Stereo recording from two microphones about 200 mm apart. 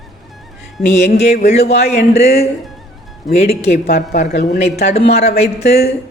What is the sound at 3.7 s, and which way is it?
Speech, 50° left (ahead or behind).